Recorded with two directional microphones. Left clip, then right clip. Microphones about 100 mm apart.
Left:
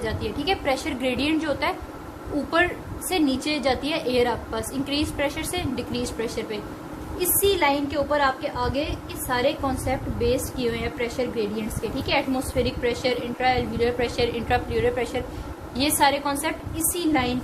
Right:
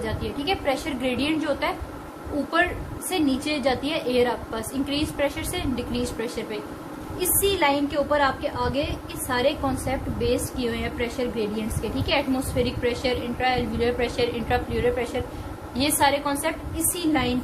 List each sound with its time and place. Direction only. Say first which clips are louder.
0.0 s a woman's voice: left 1 dB; 90° left
3.1 s a woman's voice: left 1 dB; 90° left; by 6.6 s 75° left (ahead or behind)
7.2 s a woman's voice: left 1 dB; 55° left (ahead or behind)
14.2 s a woman's voice: left 1 dB; 90° left
15.7 s a woman's voice: left 1 dB; 90° left; by 17.3 s 60° left (ahead or behind)